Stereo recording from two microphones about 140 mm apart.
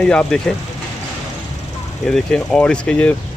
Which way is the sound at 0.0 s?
5° left (ahead or behind).